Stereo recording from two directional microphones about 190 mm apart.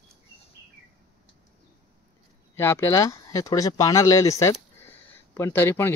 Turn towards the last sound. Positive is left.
turn(degrees=10)  # may be behind; listen again after turning